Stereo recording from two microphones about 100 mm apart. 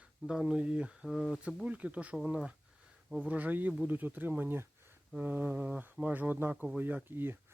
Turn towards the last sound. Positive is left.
turn(degrees=-20)  # may be behind; listen again after turning